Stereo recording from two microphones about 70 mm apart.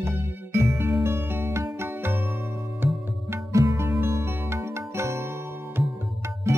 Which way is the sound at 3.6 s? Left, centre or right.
Right.